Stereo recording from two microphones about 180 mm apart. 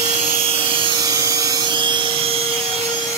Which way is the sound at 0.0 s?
35° right (ahead or behind).